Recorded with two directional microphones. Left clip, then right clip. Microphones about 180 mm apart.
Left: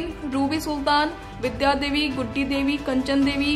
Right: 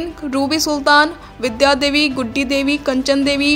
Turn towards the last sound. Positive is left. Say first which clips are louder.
# right 7 dB
turn(degrees=-35)  # may be behind; listen again after turning